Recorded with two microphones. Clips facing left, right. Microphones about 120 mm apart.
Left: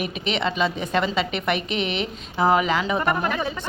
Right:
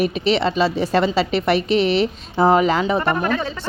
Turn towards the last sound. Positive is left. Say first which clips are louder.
# right 3 dB
turn(degrees=15)  # may be behind; listen again after turning